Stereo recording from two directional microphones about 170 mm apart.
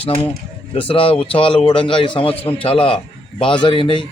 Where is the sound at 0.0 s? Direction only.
35° left (ahead or behind).